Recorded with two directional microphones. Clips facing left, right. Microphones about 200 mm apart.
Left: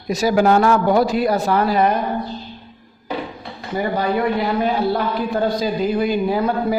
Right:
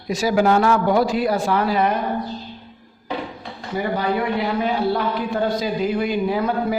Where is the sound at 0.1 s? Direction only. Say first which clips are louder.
Left 2 dB; 40° left (ahead or behind).